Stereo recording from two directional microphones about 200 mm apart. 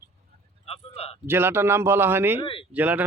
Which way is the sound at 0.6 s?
30° left (ahead or behind).